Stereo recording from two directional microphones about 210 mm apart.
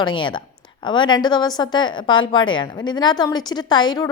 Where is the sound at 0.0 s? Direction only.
20° left (ahead or behind).